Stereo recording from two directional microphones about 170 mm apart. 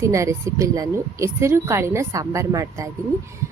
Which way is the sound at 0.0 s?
20° right (ahead or behind).